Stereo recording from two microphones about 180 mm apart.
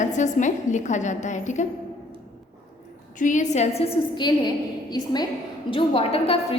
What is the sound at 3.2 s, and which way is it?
Speech, 45° left (ahead or behind).